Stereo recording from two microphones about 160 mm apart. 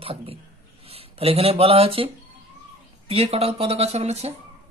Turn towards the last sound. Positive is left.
turn(degrees=-40)  # may be behind; listen again after turning